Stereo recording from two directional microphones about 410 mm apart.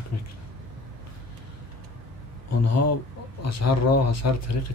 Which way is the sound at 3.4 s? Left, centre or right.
Left.